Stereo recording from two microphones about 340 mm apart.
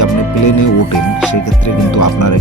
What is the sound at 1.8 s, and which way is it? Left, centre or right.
Speech, left.